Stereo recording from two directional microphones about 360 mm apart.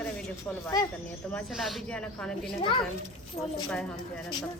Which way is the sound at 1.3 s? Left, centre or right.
Centre.